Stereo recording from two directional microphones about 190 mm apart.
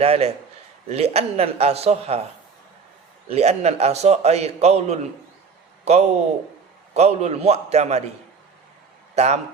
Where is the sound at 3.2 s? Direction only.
35° right (ahead or behind).